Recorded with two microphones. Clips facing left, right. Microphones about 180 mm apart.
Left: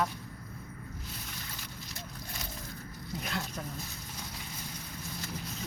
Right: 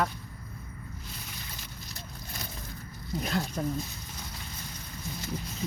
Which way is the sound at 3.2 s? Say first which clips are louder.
Right 7 dB; 35° right (ahead or behind).